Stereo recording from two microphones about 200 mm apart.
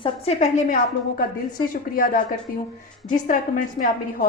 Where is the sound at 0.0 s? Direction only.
30° left (ahead or behind).